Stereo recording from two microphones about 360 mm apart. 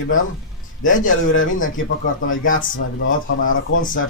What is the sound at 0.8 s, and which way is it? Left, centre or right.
Speech, left.